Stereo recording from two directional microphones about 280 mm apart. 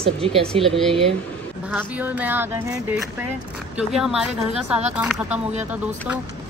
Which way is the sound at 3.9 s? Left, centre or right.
Centre.